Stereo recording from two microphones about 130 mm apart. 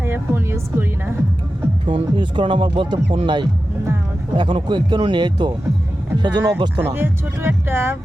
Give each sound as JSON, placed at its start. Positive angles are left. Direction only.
{"t": 0.0, "sound": "music", "side_deg": -15}
{"t": 1.9, "sound": "speech", "side_deg": -40}